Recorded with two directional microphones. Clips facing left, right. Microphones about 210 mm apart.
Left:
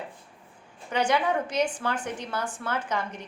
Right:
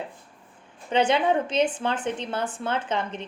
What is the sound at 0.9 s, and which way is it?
A woman's voice, 25° right (ahead or behind).